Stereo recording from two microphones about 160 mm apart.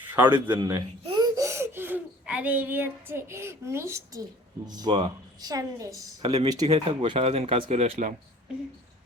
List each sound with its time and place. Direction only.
0.0 s a man's voice: 10° right (ahead or behind)
0.5 s speech: 30° right (ahead or behind); by 8.1 s 45° right (ahead or behind)